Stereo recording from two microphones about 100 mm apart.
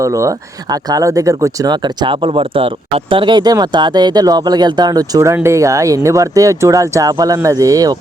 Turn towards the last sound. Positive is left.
turn(degrees=-35)  # may be behind; listen again after turning